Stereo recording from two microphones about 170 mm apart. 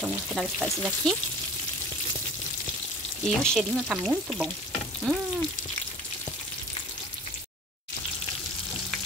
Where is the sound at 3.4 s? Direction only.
Centre (ahead or behind).